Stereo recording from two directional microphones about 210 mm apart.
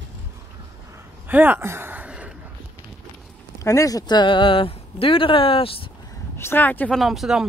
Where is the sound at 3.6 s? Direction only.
15° left (ahead or behind).